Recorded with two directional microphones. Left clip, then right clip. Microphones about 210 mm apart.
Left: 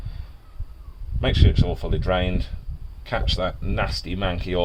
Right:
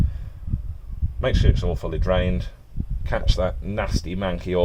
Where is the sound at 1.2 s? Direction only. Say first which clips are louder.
Even; 25° right (ahead or behind).